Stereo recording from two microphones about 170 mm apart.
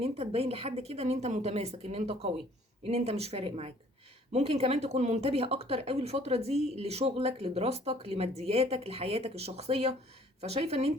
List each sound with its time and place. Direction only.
0.0 s speech: 35° right (ahead or behind)